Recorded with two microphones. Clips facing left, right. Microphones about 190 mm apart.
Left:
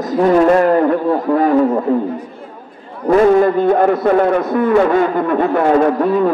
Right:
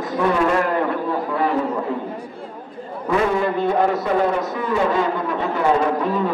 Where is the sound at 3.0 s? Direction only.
45° left (ahead or behind).